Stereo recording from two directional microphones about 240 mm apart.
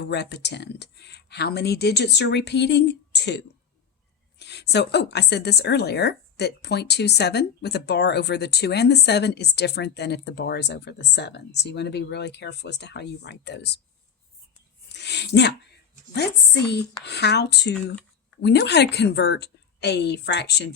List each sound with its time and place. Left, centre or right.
0.0 s a woman's voice: left
14.9 s a sound: left
16.1 s a woman's voice: left